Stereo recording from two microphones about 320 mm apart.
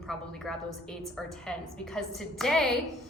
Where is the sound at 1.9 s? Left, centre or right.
Centre.